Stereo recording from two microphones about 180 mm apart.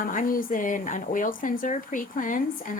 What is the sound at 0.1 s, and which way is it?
Speech, 50° left (ahead or behind).